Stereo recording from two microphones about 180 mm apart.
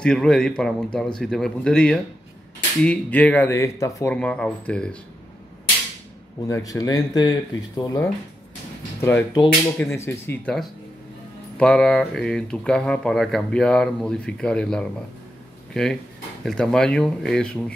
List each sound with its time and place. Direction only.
0.0 s speech: 5° left (ahead or behind)
6.4 s speech: 20° left (ahead or behind)